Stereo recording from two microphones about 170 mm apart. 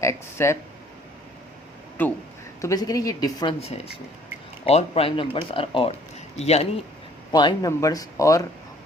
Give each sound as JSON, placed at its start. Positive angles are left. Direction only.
{"t": 0.0, "sound": "speech", "side_deg": 15}
{"t": 2.0, "sound": "speech", "side_deg": 10}
{"t": 4.6, "sound": "speech", "side_deg": 35}
{"t": 7.3, "sound": "speech", "side_deg": 25}